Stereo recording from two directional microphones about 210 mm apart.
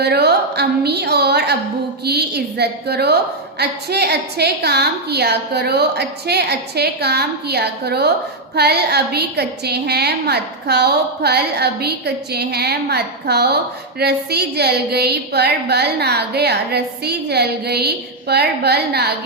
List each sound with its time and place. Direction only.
0.0 s speech: 50° right (ahead or behind)